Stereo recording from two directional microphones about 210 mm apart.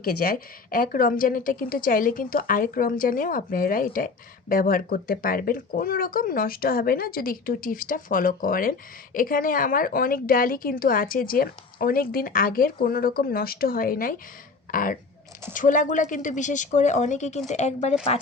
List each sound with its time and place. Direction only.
0.0 s a woman's voice: 45° left (ahead or behind)